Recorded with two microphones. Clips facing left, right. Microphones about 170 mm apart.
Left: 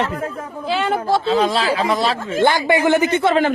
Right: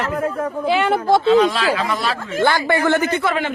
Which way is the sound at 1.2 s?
35° left (ahead or behind).